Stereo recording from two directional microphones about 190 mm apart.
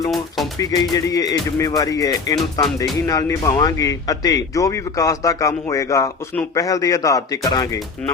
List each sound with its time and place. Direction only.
0.6 s speech: 20° left (ahead or behind)